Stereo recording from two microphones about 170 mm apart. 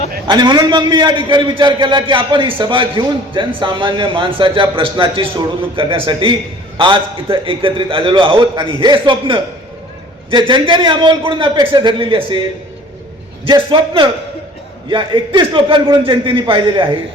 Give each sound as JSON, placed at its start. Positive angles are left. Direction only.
{"t": 0.3, "sound": "a man's voice", "side_deg": -25}